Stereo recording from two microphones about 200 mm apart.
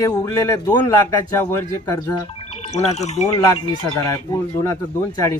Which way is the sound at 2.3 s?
30° left (ahead or behind).